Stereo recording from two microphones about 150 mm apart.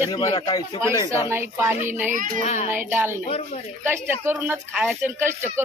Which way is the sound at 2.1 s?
60° right (ahead or behind).